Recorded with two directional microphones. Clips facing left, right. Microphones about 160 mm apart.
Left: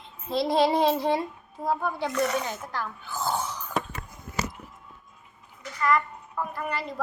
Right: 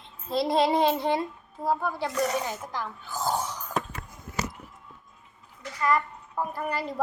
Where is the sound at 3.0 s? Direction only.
40° right (ahead or behind).